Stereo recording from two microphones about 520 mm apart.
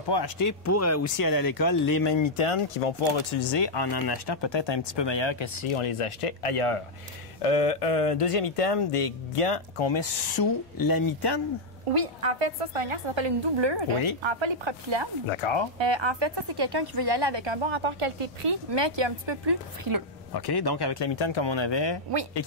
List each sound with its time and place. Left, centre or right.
0.1 s speech: left
2.1 s speech: left
7.4 s speech: left
11.9 s a woman's voice: right
15.2 s speech: left
15.8 s a woman's voice: right
18.7 s a woman's voice: right
20.3 s speech: left